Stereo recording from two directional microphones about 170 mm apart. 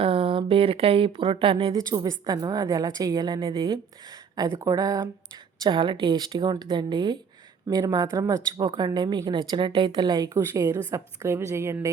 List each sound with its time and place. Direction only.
0.0 s speech: 35° right (ahead or behind)
2.0 s a woman's voice: 25° right (ahead or behind)